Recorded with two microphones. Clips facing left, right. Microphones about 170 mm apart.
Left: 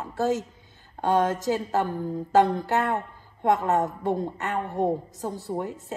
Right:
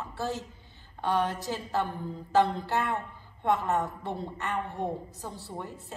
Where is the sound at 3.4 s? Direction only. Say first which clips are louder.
Left 5 dB; 40° left (ahead or behind).